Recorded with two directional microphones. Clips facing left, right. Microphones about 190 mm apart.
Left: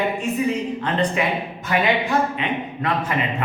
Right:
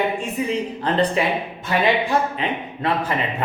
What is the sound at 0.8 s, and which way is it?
Speech, 35° right (ahead or behind).